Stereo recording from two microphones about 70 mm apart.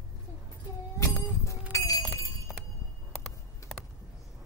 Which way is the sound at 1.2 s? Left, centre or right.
Left.